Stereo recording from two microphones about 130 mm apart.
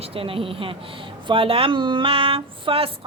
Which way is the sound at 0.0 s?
45° right (ahead or behind).